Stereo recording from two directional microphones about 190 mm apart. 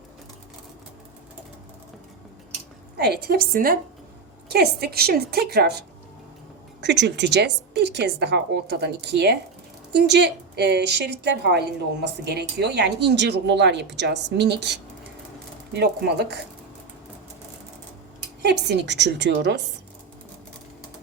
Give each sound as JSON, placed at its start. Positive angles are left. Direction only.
{"t": 3.0, "sound": "a woman's voice", "side_deg": -60}
{"t": 6.8, "sound": "a woman's voice", "side_deg": -65}
{"t": 18.4, "sound": "a woman's voice", "side_deg": -65}